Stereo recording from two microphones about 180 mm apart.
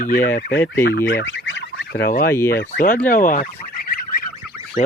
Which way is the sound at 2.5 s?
55° left (ahead or behind).